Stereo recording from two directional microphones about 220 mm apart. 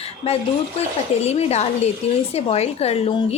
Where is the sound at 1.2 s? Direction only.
30° left (ahead or behind).